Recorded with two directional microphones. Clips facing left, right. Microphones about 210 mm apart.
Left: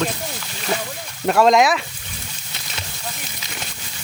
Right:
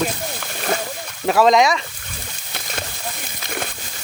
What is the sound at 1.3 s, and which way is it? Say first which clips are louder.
Speech: even; centre (ahead or behind).